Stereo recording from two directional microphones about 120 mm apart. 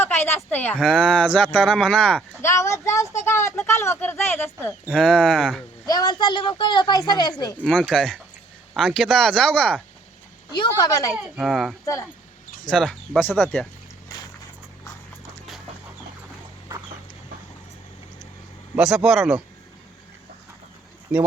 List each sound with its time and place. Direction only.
0.0 s speech: 20° left (ahead or behind)
0.8 s speech: centre (ahead or behind)
2.4 s a woman's voice: 25° left (ahead or behind)
4.9 s speech: 5° left (ahead or behind)
5.8 s a woman's voice: 30° left (ahead or behind)
7.6 s speech: centre (ahead or behind)
10.6 s a woman's voice: 30° left (ahead or behind)
11.2 s speech: 5° right (ahead or behind); by 13.7 s 15° left (ahead or behind)
18.8 s speech: 5° right (ahead or behind)
21.1 s speech: 10° right (ahead or behind)